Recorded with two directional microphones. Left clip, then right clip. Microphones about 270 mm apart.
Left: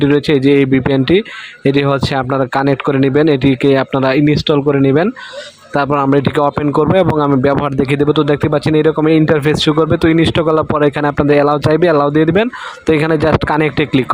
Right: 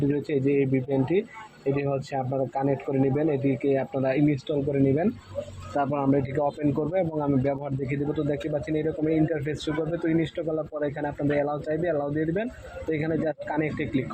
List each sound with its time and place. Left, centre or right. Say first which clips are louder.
0.2 s speech: left 13 dB; left